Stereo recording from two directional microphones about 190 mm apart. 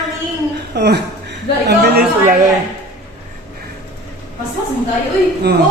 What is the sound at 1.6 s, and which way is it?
Chatter, 60° right (ahead or behind).